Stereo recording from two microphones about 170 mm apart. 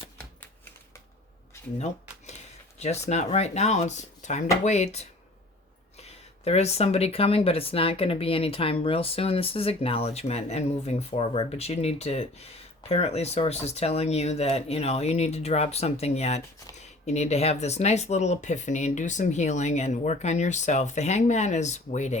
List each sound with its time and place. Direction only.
2.7 s speech: 40° left (ahead or behind)